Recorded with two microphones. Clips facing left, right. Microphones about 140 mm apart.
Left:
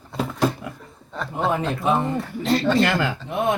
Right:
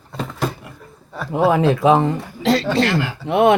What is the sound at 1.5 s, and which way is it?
Speech, 90° right.